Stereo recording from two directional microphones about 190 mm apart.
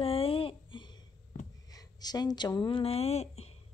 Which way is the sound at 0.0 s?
30° left (ahead or behind).